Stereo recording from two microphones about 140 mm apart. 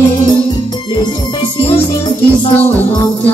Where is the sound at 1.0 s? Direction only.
40° left (ahead or behind).